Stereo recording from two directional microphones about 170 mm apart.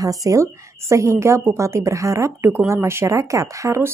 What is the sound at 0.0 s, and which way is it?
A woman's voice, 20° right (ahead or behind).